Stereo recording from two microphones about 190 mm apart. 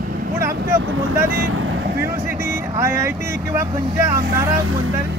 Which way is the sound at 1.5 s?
85° right.